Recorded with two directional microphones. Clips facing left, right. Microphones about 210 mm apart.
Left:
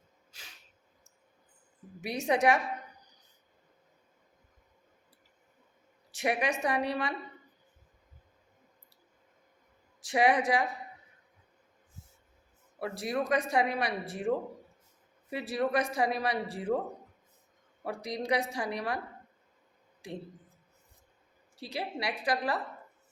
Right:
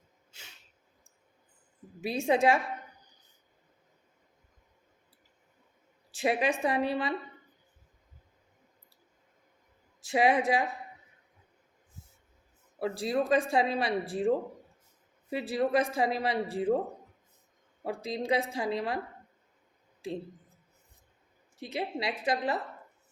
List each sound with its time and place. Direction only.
0.3 s a sound: 25° right (ahead or behind)
2.0 s speech: 25° right (ahead or behind)
6.1 s speech: 25° right (ahead or behind)
10.0 s speech: 25° right (ahead or behind)
12.8 s speech: 25° right (ahead or behind)
17.8 s speech: 25° right (ahead or behind)
21.5 s a woman's voice: 20° right (ahead or behind)